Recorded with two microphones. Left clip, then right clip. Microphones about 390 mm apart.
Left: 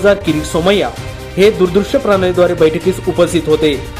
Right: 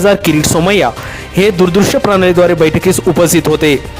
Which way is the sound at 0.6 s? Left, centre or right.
Right.